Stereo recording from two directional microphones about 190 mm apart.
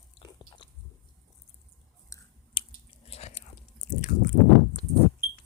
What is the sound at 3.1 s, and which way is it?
Biting, 35° left (ahead or behind).